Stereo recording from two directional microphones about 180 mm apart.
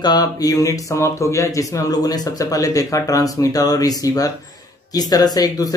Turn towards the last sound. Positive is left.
turn(degrees=20)  # may be behind; listen again after turning